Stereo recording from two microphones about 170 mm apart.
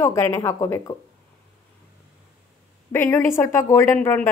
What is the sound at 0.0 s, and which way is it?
Speech, 15° left (ahead or behind).